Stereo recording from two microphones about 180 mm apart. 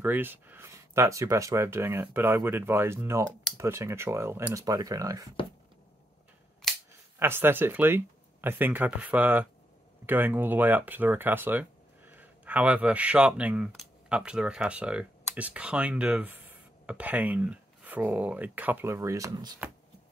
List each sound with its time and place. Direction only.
0.0 s speech: 10° right (ahead or behind)
7.2 s speech: 10° right (ahead or behind)